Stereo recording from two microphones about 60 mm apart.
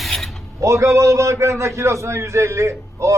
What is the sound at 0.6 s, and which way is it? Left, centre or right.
A man's voice, right.